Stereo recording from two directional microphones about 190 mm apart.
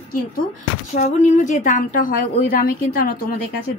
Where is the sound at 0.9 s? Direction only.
40° left (ahead or behind).